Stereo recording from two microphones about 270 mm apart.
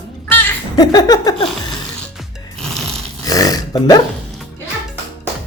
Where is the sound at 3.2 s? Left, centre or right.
Centre.